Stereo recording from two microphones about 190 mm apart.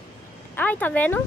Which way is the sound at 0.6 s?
10° left (ahead or behind).